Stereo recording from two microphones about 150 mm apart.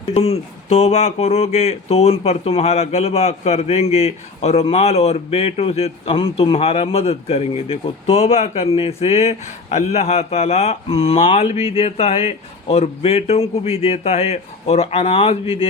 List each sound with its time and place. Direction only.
0.1 s speech: 45° left (ahead or behind)